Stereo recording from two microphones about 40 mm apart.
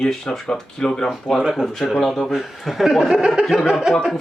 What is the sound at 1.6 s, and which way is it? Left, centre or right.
Speech, centre.